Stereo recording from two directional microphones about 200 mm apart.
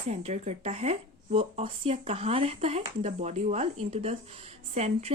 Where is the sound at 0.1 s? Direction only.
35° right (ahead or behind).